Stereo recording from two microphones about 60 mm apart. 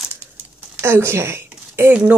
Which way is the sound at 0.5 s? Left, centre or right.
Right.